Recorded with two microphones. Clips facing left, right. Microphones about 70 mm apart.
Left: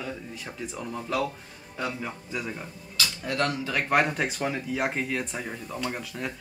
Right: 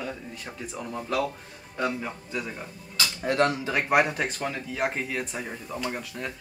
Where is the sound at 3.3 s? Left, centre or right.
Right.